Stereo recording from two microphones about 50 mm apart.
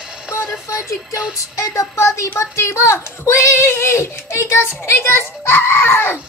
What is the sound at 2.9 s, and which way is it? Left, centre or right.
A child's voice, left.